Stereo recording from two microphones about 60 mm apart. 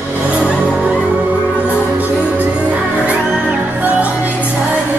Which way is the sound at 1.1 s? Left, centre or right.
Right.